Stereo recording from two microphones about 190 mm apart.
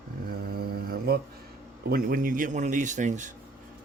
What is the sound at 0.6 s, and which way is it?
Mantra, 55° right (ahead or behind).